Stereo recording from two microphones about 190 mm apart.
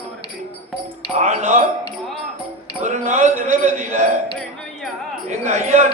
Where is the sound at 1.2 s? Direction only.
40° right (ahead or behind).